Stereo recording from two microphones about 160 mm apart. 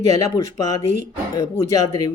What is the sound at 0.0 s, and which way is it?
Speech, 20° left (ahead or behind).